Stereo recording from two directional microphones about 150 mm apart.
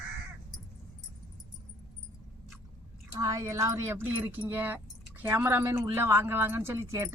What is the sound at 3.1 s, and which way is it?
Speech, 25° right (ahead or behind).